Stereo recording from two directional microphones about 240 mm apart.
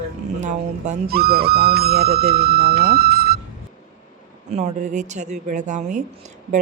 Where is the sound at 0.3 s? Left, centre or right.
Right.